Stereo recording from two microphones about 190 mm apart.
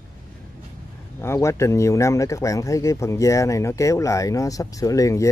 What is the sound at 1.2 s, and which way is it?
Speech, 15° left (ahead or behind).